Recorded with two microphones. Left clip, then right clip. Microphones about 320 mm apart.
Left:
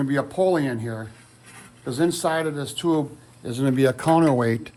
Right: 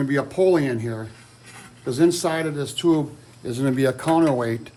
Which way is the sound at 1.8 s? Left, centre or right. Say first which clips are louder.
Right 3 dB; centre.